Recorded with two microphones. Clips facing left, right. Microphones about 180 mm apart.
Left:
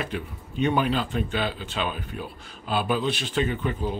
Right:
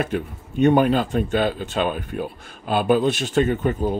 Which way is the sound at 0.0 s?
45° right (ahead or behind).